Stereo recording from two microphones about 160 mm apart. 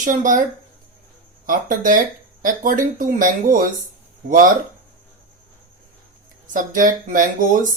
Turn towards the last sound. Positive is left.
turn(degrees=-55)  # may be behind; listen again after turning